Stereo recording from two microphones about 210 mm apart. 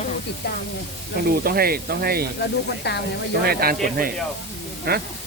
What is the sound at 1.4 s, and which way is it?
Speech, 45° right (ahead or behind).